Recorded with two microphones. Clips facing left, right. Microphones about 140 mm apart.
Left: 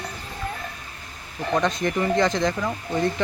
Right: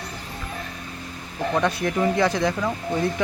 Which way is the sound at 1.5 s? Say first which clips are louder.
Left 1 dB; 5° right (ahead or behind).